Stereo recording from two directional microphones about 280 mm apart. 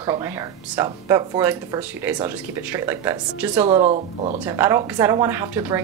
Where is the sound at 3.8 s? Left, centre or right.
Right.